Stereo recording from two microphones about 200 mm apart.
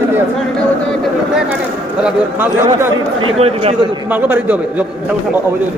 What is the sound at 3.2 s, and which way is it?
Speech, 30° right (ahead or behind).